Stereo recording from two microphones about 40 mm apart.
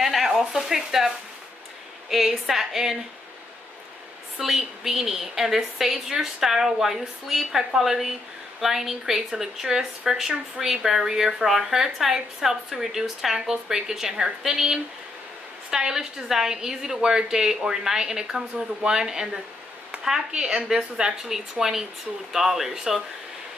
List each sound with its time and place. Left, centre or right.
0.0 s a sound: centre
2.0 s speech: centre
4.4 s speech: centre